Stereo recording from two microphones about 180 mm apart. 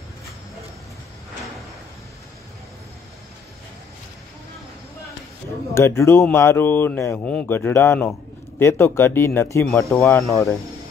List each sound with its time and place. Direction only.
5.8 s speech: 15° left (ahead or behind)